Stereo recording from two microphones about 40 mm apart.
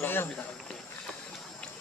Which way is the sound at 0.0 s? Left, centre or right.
Left.